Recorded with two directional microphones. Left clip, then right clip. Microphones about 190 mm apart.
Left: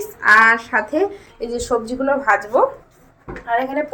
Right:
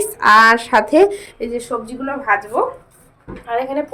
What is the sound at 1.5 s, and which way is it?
A woman's voice, 10° left (ahead or behind).